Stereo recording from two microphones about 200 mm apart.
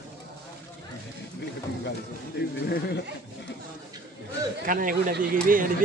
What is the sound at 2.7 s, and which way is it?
Speech, 55° left (ahead or behind).